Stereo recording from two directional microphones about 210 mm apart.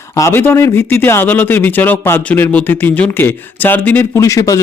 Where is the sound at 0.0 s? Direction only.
15° left (ahead or behind).